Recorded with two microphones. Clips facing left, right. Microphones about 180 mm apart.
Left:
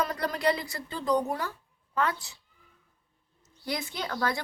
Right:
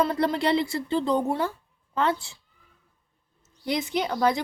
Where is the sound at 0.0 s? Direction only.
30° right (ahead or behind).